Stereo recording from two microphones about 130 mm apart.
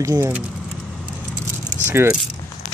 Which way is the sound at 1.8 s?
20° right (ahead or behind).